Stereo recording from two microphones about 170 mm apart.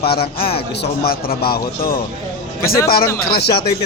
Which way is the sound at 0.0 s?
65° left (ahead or behind).